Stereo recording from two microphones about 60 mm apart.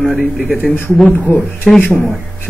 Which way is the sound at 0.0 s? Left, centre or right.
Centre.